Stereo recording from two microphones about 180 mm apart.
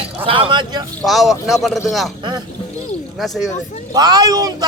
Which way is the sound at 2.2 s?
25° right (ahead or behind).